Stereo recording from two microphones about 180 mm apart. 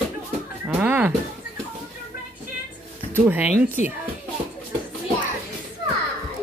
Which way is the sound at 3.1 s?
10° right (ahead or behind).